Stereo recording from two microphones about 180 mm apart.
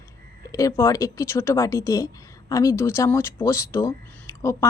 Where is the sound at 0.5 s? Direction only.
15° left (ahead or behind).